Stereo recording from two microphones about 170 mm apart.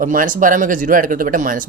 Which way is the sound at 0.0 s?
55° right (ahead or behind).